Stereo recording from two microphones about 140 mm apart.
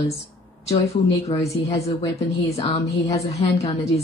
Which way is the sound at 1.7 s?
45° left (ahead or behind).